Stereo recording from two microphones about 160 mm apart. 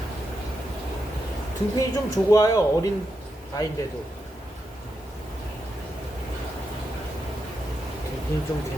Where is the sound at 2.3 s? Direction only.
20° left (ahead or behind).